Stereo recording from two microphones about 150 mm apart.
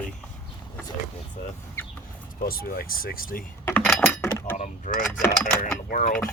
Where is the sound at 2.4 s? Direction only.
80° left.